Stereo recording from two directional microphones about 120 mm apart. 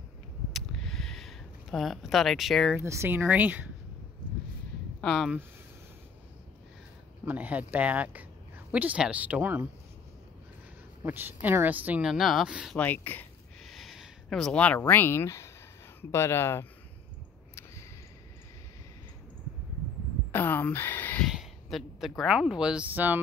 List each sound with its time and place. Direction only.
0.5 s a sound: centre (ahead or behind)
2.8 s speech: 20° right (ahead or behind)
5.0 s speech: 5° left (ahead or behind)
7.2 s speech: 15° right (ahead or behind)
11.1 s speech: 15° right (ahead or behind)
12.7 s speech: 15° left (ahead or behind)
13.7 s speech: centre (ahead or behind); by 16.6 s 20° left (ahead or behind)
20.2 s a sound: 15° left (ahead or behind)
21.3 s a sound: centre (ahead or behind)
22.2 s speech: 5° right (ahead or behind)